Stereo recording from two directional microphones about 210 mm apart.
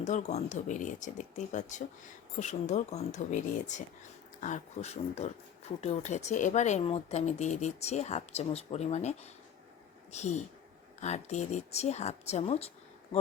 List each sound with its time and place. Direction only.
0.0 s speech: 35° left (ahead or behind)